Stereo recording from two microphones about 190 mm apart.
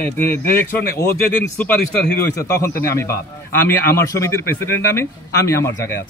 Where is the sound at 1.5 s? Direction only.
10° left (ahead or behind).